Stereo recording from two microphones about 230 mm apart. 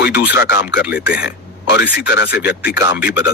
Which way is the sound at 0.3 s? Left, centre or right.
Left.